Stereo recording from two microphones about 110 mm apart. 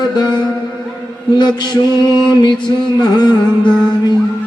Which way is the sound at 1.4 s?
40° left (ahead or behind).